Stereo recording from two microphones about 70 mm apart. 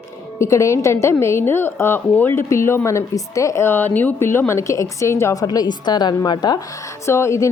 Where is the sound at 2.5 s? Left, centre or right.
Left.